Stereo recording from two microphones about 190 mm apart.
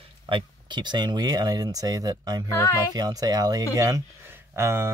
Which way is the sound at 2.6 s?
10° left (ahead or behind).